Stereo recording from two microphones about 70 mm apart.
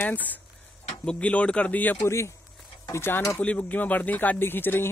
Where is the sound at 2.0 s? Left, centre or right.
Left.